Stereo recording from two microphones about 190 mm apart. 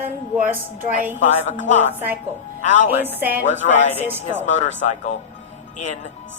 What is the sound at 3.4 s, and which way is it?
Speech, 40° left (ahead or behind).